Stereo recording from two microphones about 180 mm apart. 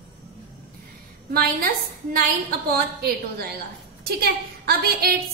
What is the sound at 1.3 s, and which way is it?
Speech, 55° right (ahead or behind).